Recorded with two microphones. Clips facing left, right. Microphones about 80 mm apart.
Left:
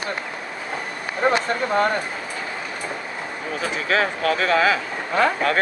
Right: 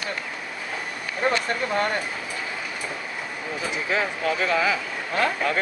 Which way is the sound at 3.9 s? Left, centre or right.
Left.